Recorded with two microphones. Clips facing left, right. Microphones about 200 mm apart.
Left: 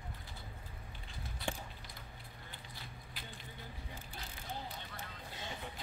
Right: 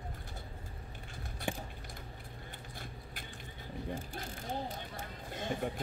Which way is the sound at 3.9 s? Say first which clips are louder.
Right 9 dB; 45° right (ahead or behind).